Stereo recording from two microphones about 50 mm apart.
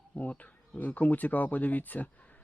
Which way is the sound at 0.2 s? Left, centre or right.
Left.